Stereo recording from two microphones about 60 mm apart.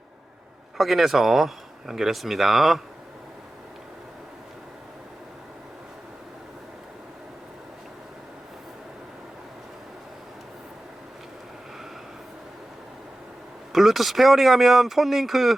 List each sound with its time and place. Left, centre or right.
0.8 s speech: centre
13.7 s speech: centre